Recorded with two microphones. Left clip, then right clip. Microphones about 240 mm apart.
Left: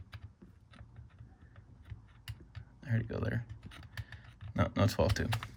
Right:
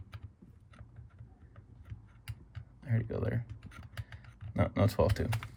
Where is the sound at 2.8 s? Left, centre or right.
Centre.